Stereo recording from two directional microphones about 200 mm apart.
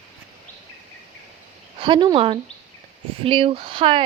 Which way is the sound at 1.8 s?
20° right (ahead or behind).